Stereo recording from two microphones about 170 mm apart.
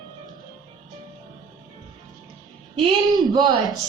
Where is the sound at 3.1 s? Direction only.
25° right (ahead or behind).